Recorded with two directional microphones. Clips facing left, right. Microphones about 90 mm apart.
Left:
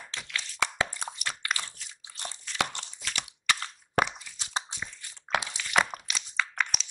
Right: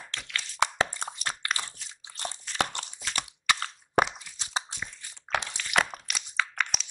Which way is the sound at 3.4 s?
15° right (ahead or behind).